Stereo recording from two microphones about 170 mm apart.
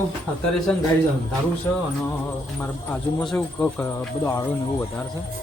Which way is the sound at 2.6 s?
5° left (ahead or behind).